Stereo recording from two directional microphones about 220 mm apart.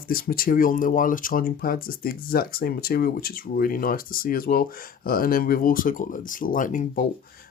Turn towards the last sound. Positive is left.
turn(degrees=35)  # may be behind; listen again after turning